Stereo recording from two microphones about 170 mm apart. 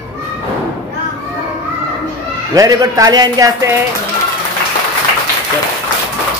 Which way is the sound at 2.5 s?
20° right (ahead or behind).